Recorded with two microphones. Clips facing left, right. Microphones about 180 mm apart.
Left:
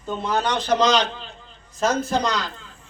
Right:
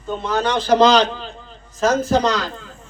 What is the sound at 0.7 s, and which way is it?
Speech, 35° right (ahead or behind).